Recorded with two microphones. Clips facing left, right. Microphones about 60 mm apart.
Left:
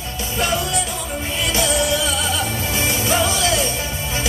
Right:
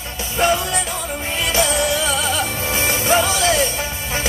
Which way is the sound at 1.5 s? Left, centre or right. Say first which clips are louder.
Right 1 dB; right.